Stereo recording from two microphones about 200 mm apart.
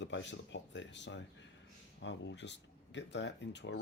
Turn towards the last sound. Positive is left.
turn(degrees=60)  # may be behind; listen again after turning